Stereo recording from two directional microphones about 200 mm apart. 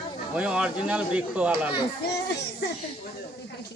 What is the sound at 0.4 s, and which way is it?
Speech, 5° right (ahead or behind).